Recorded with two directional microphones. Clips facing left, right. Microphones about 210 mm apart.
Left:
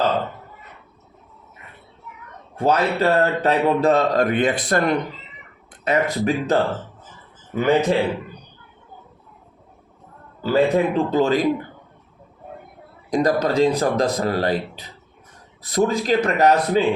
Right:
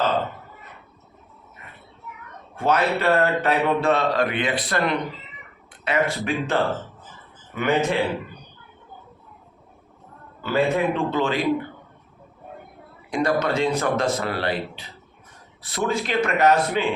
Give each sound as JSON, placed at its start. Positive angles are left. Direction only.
{"t": 2.6, "sound": "a man's voice", "side_deg": 35}
{"t": 10.4, "sound": "speech", "side_deg": 35}
{"t": 13.1, "sound": "speech", "side_deg": 40}